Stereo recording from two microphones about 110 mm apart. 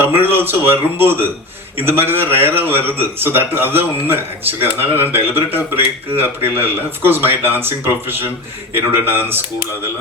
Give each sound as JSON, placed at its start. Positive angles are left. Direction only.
{"t": 0.0, "sound": "a man's voice", "side_deg": -20}